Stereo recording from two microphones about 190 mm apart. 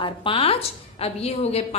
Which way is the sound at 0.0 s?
25° left (ahead or behind).